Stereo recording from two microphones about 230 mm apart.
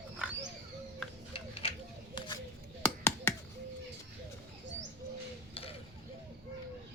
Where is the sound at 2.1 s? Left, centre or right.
Centre.